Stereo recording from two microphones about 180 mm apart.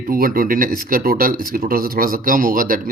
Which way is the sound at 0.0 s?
55° right (ahead or behind).